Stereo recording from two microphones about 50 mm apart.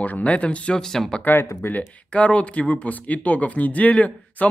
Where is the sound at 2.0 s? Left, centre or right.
Left.